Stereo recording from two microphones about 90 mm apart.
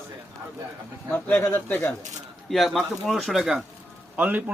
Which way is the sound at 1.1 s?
20° left (ahead or behind).